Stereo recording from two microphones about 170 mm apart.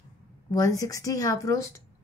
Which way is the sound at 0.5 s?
20° left (ahead or behind).